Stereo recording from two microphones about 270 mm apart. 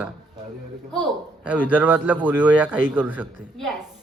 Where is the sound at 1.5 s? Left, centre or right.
Centre.